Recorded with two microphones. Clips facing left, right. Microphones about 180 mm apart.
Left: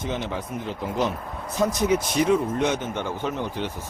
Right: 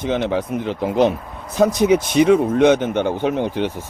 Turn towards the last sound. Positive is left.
turn(degrees=-65)  # may be behind; listen again after turning